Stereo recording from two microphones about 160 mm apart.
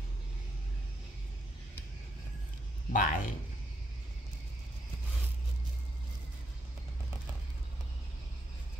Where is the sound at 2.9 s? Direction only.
55° left (ahead or behind).